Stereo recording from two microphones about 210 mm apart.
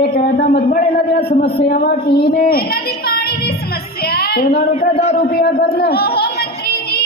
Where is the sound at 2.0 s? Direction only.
50° left (ahead or behind).